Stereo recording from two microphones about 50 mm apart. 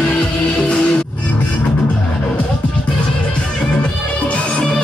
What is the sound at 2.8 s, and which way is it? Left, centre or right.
Music, left.